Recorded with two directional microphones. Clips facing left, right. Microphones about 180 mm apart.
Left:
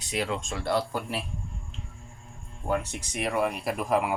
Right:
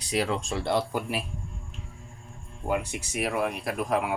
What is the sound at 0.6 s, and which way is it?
Speech, 20° right (ahead or behind).